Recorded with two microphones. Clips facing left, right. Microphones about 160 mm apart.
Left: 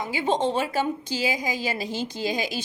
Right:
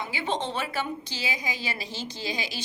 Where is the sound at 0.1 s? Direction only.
45° left (ahead or behind).